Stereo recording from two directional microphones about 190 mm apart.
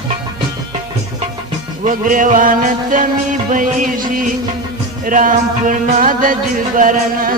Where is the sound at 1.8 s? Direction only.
45° right (ahead or behind).